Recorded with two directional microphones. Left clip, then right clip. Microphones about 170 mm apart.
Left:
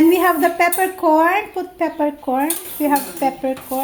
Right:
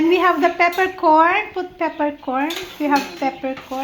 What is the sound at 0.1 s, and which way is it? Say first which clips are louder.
A child's voice: left 1 dB; 25° left (ahead or behind).